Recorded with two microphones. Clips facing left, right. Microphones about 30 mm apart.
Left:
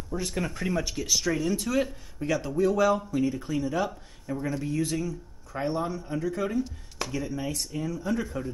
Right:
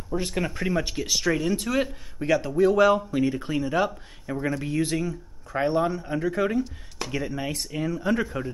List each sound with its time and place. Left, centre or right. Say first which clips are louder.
0.1 s speech: right 4 dB; centre